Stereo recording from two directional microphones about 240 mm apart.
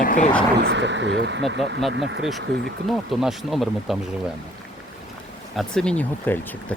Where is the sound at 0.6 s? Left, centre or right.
Right.